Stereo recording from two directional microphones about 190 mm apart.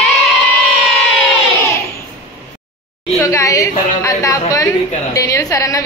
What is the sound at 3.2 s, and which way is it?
A woman's voice, 15° left (ahead or behind).